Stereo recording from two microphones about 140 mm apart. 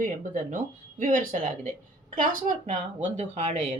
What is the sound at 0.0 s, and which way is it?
Speech, 70° right (ahead or behind).